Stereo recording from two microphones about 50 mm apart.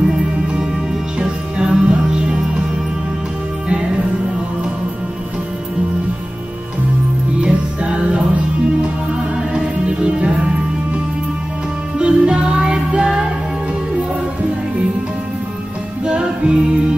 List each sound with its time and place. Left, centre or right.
1.2 s music: centre
7.3 s music: right
9.5 s music: centre
12.0 s music: right
16.1 s music: centre